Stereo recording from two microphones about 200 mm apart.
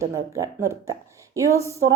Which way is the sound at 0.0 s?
15° right (ahead or behind).